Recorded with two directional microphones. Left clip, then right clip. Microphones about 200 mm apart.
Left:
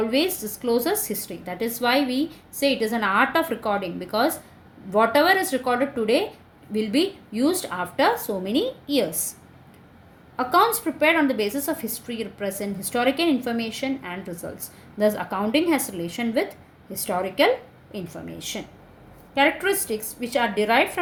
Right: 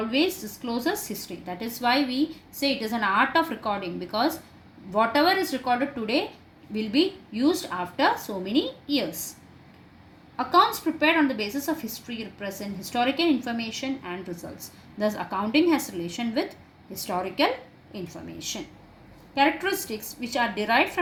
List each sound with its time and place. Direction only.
0.1 s speech: 55° left (ahead or behind)
10.3 s speech: 55° left (ahead or behind)